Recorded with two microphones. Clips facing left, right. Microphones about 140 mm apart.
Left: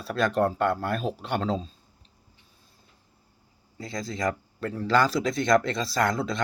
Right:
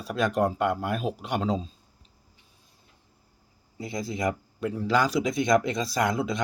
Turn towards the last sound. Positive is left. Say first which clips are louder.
# even
turn(degrees=-10)  # may be behind; listen again after turning